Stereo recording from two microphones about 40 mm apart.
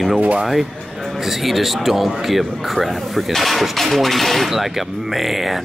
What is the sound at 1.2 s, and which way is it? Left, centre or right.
A man's voice, centre.